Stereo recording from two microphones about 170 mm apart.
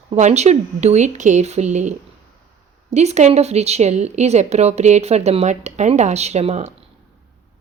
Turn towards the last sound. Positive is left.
turn(degrees=-40)  # may be behind; listen again after turning